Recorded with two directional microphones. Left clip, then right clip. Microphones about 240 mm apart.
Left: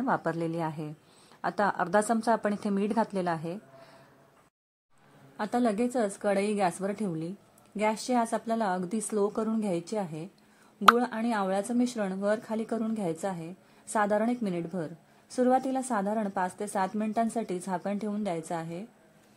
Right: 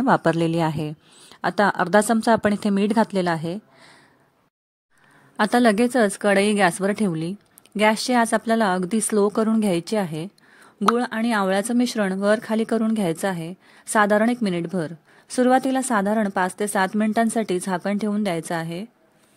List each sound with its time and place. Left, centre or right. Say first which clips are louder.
0.0 s a woman's voice: right 10 dB; right
5.4 s a woman's voice: right 10 dB; right